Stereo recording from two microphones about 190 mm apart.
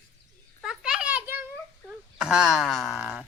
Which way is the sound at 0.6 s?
5° right (ahead or behind).